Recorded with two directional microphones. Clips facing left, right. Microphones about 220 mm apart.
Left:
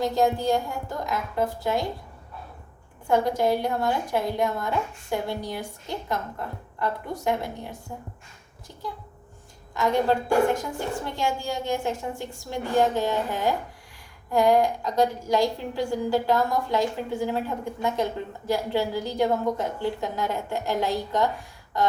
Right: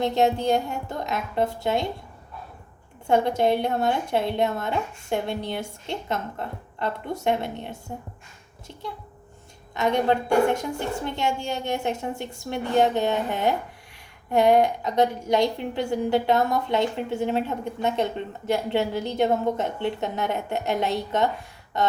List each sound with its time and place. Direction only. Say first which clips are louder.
0.0 s a woman's voice: right 1 dB; 25° right (ahead or behind)
3.1 s a woman's voice: right 1 dB; 25° right (ahead or behind)
9.7 s a woman's voice: right 1 dB; 20° right (ahead or behind)